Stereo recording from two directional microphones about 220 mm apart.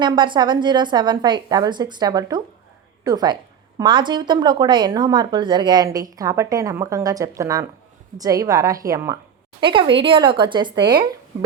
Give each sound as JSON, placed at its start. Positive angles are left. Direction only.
{"t": 0.0, "sound": "a woman's voice", "side_deg": -20}